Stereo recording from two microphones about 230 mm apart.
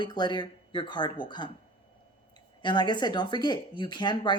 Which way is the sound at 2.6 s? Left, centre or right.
Centre.